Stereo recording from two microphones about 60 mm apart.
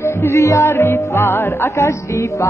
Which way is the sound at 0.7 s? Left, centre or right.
Left.